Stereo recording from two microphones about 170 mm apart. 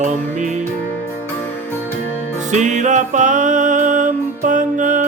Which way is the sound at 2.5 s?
45° right (ahead or behind).